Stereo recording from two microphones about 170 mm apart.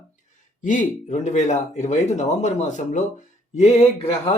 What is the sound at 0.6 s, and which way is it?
Speech, 50° left (ahead or behind).